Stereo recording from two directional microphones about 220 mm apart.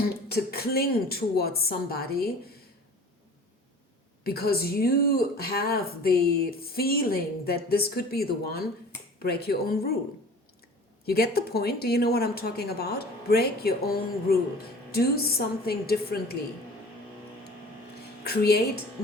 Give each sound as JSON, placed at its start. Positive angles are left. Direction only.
{"t": 0.3, "sound": "a woman's voice", "side_deg": 45}
{"t": 4.2, "sound": "a woman's voice", "side_deg": 45}
{"t": 11.0, "sound": "a woman's voice", "side_deg": 45}
{"t": 18.2, "sound": "speech", "side_deg": 45}